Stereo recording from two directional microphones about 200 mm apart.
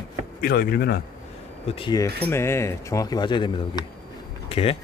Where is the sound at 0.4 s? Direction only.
50° left (ahead or behind).